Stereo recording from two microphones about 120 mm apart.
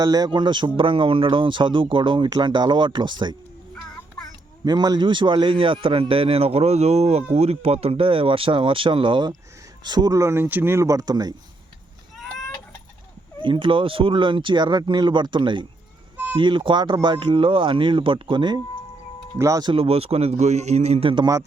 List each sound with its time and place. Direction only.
0.0 s a man's voice: 35° right (ahead or behind)
4.6 s speech: 35° right (ahead or behind)
13.4 s speech: 45° right (ahead or behind)
19.4 s speech: 30° right (ahead or behind)
19.7 s speech: 50° right (ahead or behind)